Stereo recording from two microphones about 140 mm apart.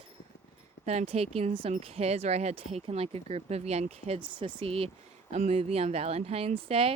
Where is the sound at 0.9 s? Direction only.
50° right (ahead or behind).